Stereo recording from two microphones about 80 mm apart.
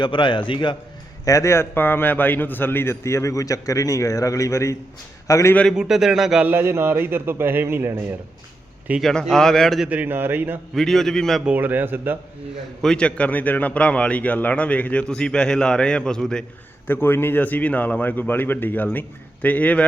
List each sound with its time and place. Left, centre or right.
0.0 s a man's voice: left
1.2 s a man's voice: left
5.7 s speech: centre
6.4 s a man's voice: right
9.0 s a man's voice: centre
9.9 s a man's voice: right
10.8 s a man's voice: centre
11.4 s a man's voice: right
12.8 s a man's voice: centre
16.8 s a man's voice: left